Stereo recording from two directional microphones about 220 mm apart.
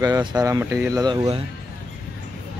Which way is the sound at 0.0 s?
15° right (ahead or behind).